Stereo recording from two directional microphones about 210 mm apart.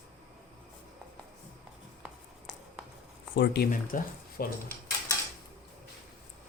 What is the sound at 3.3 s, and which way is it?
Speech, 50° left (ahead or behind).